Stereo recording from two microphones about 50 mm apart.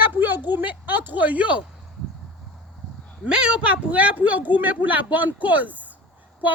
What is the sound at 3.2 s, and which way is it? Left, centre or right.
Speech, centre.